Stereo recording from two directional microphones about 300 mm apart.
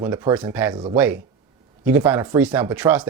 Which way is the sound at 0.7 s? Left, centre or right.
Centre.